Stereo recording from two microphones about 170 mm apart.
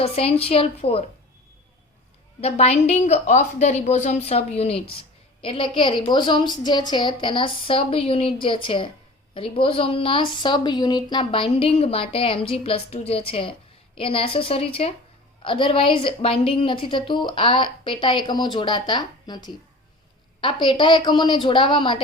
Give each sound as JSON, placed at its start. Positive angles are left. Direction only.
{"t": 0.0, "sound": "a woman's voice", "side_deg": 35}
{"t": 2.4, "sound": "a woman's voice", "side_deg": 40}